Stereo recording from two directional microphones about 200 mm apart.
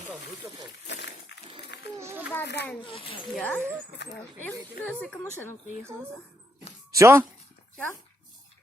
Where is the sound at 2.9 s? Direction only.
30° left (ahead or behind).